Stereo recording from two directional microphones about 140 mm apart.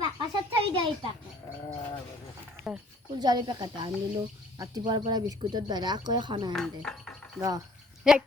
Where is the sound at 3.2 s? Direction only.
30° right (ahead or behind).